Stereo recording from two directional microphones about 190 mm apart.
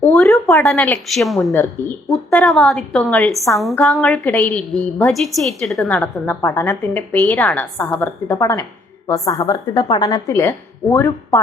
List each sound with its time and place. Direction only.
0.0 s a woman's voice: 5° left (ahead or behind)
1.8 s a woman's voice: 15° left (ahead or behind)
2.1 s a woman's voice: centre (ahead or behind)